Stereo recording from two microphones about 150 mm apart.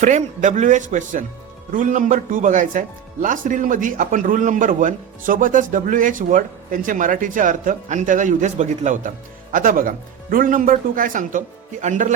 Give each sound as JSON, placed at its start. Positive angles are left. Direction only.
{"t": 0.0, "sound": "speech", "side_deg": -55}